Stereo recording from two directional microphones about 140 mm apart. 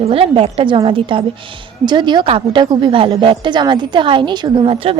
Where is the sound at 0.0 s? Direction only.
45° right (ahead or behind).